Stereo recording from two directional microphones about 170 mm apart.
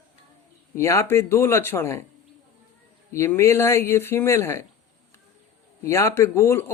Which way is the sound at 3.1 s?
15° left (ahead or behind).